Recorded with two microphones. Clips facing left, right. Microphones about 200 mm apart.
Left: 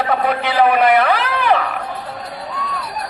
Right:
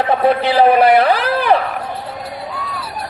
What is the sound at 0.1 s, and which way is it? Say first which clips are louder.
A man's voice: right 4 dB; 30° right (ahead or behind).